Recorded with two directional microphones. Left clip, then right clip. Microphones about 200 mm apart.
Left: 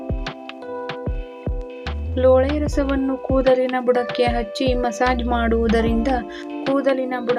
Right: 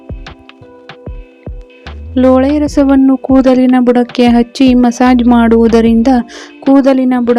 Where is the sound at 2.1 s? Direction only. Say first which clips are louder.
Right 7 dB; 50° right (ahead or behind).